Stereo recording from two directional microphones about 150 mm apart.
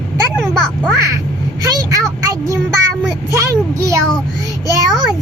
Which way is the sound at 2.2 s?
20° right (ahead or behind).